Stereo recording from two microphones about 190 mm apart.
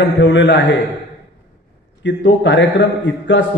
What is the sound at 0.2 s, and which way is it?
Speech, 70° left (ahead or behind).